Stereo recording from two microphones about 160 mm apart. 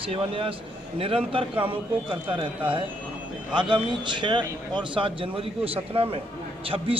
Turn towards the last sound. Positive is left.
turn(degrees=-35)  # may be behind; listen again after turning